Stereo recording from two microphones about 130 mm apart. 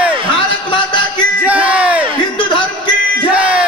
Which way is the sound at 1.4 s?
10° right (ahead or behind).